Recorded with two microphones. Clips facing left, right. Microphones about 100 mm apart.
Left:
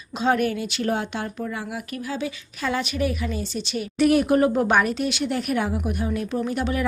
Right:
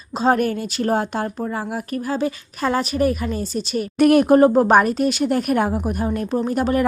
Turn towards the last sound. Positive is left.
turn(degrees=-45)  # may be behind; listen again after turning